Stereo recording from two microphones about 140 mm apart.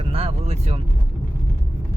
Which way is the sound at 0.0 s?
45° right (ahead or behind).